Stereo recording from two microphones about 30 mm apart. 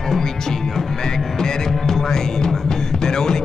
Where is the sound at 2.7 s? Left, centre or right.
Left.